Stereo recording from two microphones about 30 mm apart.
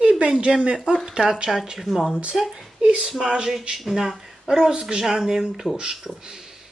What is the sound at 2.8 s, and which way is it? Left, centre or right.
Speech, right.